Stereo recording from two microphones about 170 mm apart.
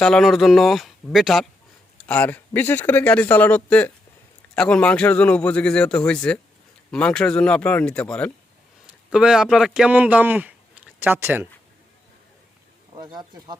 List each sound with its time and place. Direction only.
0.0 s a man's voice: centre (ahead or behind)
9.0 s speech: 5° right (ahead or behind)
13.0 s speech: 25° right (ahead or behind)